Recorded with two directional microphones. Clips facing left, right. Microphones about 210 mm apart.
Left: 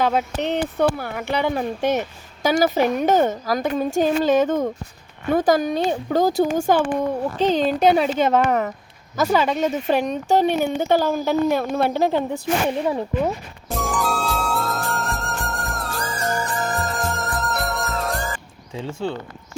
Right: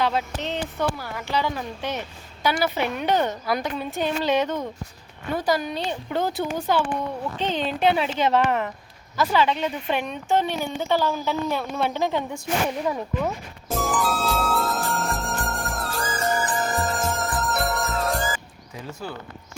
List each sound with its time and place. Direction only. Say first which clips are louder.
0.4 s speech: left 6 dB; 60° left (ahead or behind); by 13.3 s 30° left (ahead or behind)
13.7 s music: left 1 dB; centre (ahead or behind)
18.7 s speech: left 8 dB; 30° left (ahead or behind)